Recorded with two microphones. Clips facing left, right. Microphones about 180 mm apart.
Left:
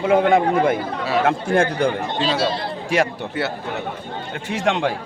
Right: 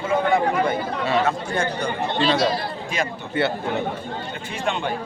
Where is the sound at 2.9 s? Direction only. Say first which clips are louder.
Left 8 dB; 80° left.